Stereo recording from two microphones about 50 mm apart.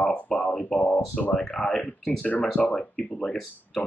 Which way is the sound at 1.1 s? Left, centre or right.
Left.